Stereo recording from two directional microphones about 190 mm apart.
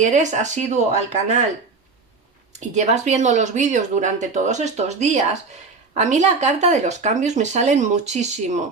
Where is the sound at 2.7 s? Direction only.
35° right (ahead or behind).